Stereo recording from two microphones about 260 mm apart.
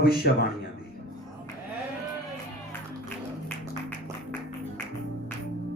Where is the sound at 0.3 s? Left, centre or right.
Left.